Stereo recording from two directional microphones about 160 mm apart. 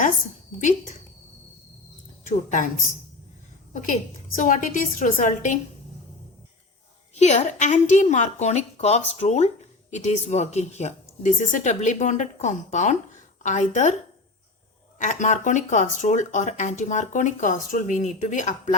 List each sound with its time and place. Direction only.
0.6 s speech: 50° left (ahead or behind)
2.2 s a woman's voice: 55° left (ahead or behind)
3.7 s a woman's voice: 55° left (ahead or behind)
7.2 s speech: 45° left (ahead or behind)
14.9 s speech: 50° left (ahead or behind)